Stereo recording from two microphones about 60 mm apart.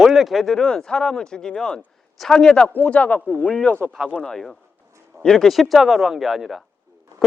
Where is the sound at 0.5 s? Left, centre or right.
Centre.